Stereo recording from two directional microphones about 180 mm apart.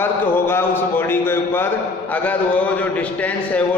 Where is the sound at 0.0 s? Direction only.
10° left (ahead or behind).